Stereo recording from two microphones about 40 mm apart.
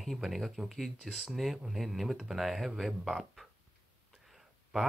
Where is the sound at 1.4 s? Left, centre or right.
Centre.